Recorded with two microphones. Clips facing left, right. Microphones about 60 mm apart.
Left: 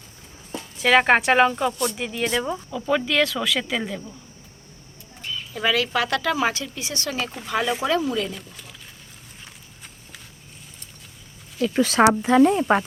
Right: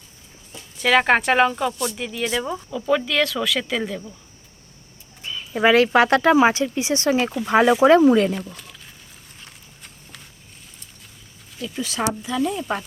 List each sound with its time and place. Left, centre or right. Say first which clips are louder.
0.8 s speech: even; centre
5.3 s speech: right 7 dB; right
8.4 s speech: right 7 dB; centre
9.4 s a sound: even; centre
11.6 s speech: left 8 dB; left